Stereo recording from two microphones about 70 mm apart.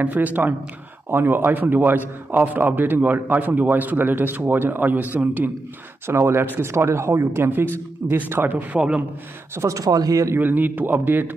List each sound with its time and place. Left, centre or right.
0.0 s a man's voice: right
6.0 s a man's voice: right
8.7 s a man's voice: centre
9.6 s speech: right
10.3 s a man's voice: right